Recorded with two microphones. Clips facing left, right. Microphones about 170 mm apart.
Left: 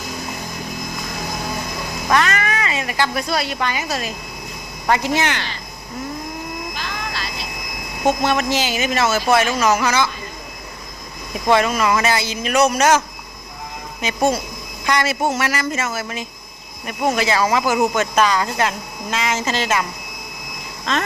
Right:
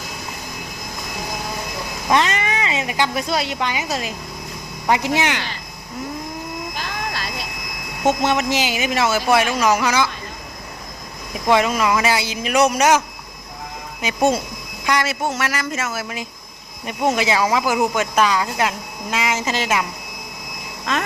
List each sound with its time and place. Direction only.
2.0 s speech: 25° right (ahead or behind)
6.7 s vehicle: 45° right (ahead or behind)
8.0 s speech: 20° right (ahead or behind)
11.4 s speech: 15° right (ahead or behind)
14.8 s speech: 5° right (ahead or behind)